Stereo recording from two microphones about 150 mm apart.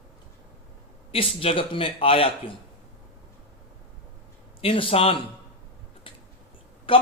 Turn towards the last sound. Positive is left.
turn(degrees=35)  # may be behind; listen again after turning